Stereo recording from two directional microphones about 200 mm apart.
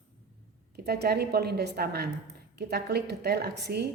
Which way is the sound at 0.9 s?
55° right (ahead or behind).